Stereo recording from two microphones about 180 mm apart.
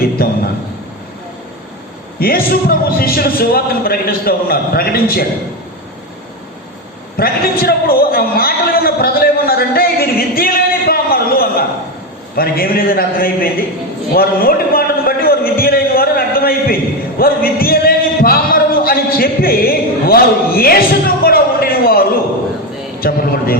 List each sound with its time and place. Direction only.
2.1 s a man's voice: 55° left (ahead or behind)
7.2 s a man's voice: 55° left (ahead or behind)
14.1 s a sound: 55° left (ahead or behind)
23.0 s a man's voice: 55° left (ahead or behind)